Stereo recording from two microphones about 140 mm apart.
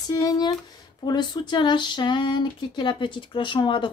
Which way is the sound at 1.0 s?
30° left (ahead or behind).